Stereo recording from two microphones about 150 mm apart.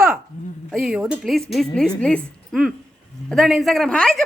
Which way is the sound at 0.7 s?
Centre (ahead or behind).